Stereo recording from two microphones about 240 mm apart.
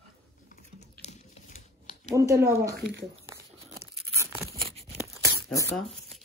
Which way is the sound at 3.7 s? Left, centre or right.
Centre.